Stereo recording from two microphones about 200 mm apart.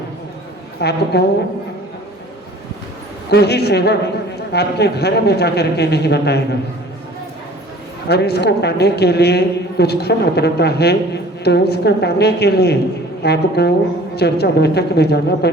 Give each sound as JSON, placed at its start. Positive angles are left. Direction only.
{"t": 0.8, "sound": "a man's voice", "side_deg": 55}
{"t": 3.2, "sound": "a man's voice", "side_deg": 55}
{"t": 8.0, "sound": "a man's voice", "side_deg": 55}